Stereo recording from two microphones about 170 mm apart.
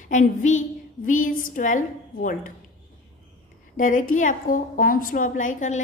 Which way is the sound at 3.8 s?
50° left (ahead or behind).